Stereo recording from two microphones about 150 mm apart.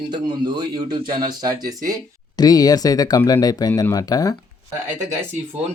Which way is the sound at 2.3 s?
25° left (ahead or behind).